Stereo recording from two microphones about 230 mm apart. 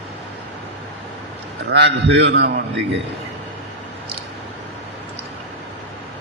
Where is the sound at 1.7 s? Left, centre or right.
Right.